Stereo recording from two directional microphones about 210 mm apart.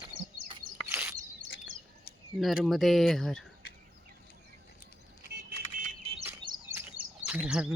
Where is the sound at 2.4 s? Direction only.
Centre (ahead or behind).